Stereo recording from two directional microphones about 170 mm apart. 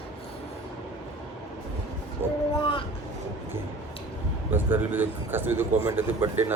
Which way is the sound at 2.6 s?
30° left (ahead or behind).